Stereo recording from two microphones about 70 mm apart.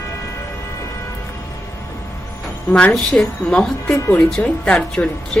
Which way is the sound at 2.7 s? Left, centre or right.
Centre.